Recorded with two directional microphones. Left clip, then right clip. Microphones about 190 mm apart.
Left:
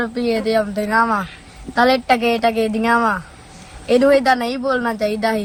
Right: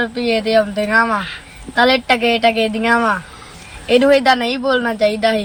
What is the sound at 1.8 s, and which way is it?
Speech, 30° left (ahead or behind).